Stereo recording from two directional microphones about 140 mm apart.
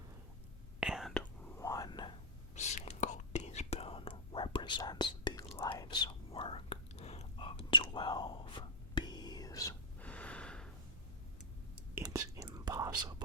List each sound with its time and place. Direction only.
0.8 s whispering: 5° right (ahead or behind)
1.2 s whispering: 10° left (ahead or behind)
1.6 s whispering: 25° left (ahead or behind)
2.6 s whispering: 55° left (ahead or behind); by 9.7 s 25° left (ahead or behind)
10.0 s gasp: 10° left (ahead or behind)
12.0 s whispering: 25° right (ahead or behind)